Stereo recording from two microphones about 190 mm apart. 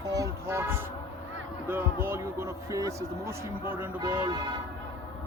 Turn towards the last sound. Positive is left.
turn(degrees=-20)  # may be behind; listen again after turning